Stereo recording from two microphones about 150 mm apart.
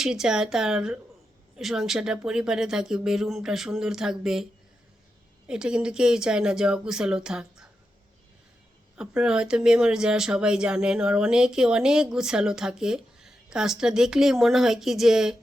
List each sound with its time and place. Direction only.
0.0 s speech: 5° right (ahead or behind)
5.5 s speech: 5° right (ahead or behind)
9.0 s speech: 5° right (ahead or behind)